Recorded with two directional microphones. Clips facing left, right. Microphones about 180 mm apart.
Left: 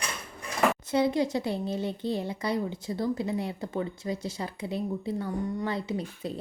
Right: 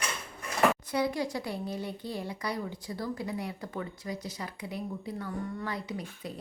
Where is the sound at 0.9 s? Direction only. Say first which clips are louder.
Left 5 dB; 25° left (ahead or behind).